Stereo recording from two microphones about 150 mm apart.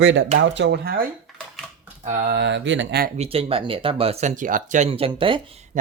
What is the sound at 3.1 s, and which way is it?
Speech, 40° right (ahead or behind).